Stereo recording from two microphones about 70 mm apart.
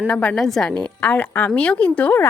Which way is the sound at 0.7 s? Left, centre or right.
Left.